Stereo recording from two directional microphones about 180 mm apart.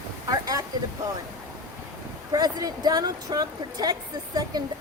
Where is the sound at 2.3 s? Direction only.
20° right (ahead or behind).